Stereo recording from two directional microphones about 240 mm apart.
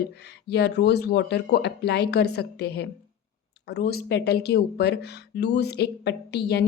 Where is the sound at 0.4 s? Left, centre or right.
Left.